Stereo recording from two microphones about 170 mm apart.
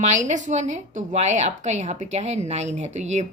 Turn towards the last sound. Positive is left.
turn(degrees=-45)  # may be behind; listen again after turning